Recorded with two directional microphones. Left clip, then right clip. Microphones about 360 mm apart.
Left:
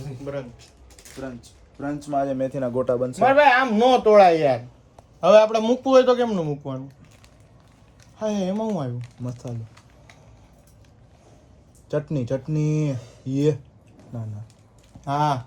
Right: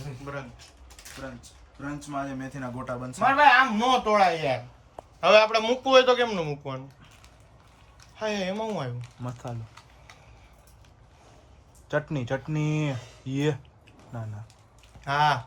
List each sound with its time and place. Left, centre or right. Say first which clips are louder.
1.2 s speech: left 7 dB; centre
5.2 s speech: left 4 dB; right
8.2 s speech: left 3 dB; right
11.9 s speech: left 3 dB; centre
15.0 s speech: even; right